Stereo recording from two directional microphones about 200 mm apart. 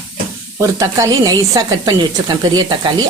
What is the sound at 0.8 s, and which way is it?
A woman's voice, 15° right (ahead or behind).